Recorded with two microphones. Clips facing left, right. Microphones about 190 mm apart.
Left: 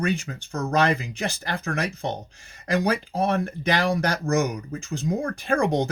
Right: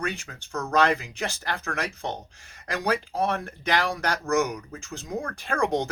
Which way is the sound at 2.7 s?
15° left (ahead or behind).